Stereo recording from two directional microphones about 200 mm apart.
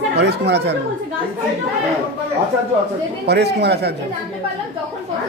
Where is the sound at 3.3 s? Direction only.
55° right (ahead or behind).